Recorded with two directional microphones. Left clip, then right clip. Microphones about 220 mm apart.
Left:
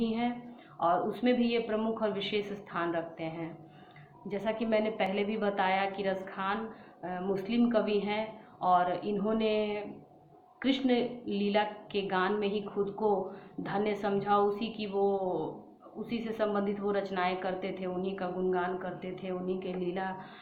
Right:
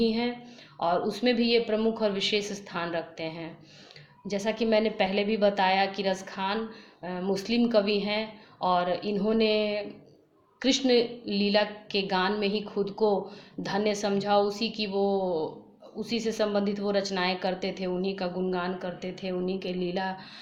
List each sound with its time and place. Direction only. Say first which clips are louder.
0.0 s a woman's voice: right 5 dB; 45° right (ahead or behind)